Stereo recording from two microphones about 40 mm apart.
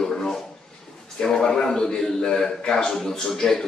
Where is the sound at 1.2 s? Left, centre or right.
Centre.